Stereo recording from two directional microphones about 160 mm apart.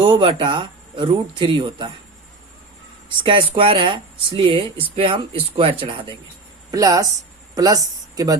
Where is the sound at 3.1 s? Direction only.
30° right (ahead or behind).